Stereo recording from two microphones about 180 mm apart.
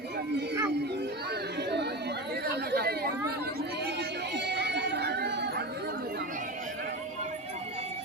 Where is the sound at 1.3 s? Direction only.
65° right (ahead or behind).